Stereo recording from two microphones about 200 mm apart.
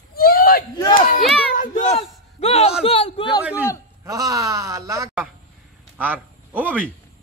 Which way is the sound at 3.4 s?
10° right (ahead or behind).